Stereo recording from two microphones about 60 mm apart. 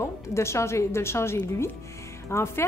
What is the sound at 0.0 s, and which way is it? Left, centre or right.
A woman's voice, left.